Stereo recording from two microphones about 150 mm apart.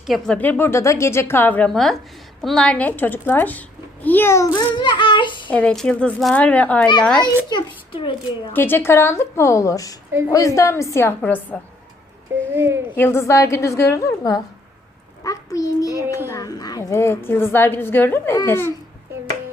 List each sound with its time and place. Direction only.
0.3 s a woman's voice: 10° left (ahead or behind); by 5.5 s 35° left (ahead or behind)
5.5 s a woman's voice: 10° left (ahead or behind)
7.5 s a child's voice: 35° left (ahead or behind)
8.5 s a woman's voice: 15° left (ahead or behind)
10.1 s a woman's voice: 15° right (ahead or behind)
10.3 s a woman's voice: 20° left (ahead or behind)
12.5 s speech: 15° right (ahead or behind)
13.0 s a woman's voice: 15° left (ahead or behind)